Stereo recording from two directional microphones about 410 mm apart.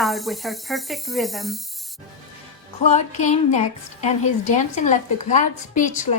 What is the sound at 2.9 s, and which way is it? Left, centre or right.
A woman's voice, centre.